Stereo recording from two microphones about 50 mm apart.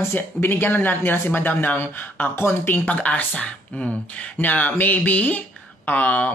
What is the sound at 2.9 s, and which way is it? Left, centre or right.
Speech, left.